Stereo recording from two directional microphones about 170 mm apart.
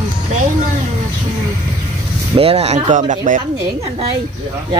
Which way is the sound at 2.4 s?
35° right (ahead or behind).